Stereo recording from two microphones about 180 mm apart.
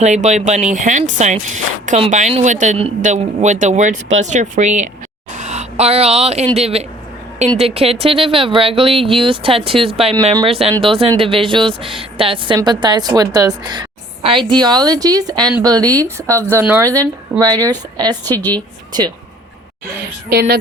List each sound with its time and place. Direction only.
0.0 s a woman's voice: 40° right (ahead or behind); by 18.2 s 25° right (ahead or behind)
18.3 s a woman's voice: 10° left (ahead or behind)
18.9 s a woman's voice: 25° right (ahead or behind)
20.3 s a woman's voice: 60° right (ahead or behind)